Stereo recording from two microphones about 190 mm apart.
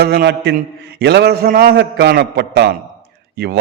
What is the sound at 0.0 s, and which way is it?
A man's voice, 55° right (ahead or behind).